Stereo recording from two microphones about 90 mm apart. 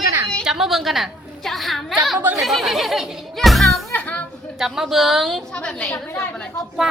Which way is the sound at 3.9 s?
20° left (ahead or behind).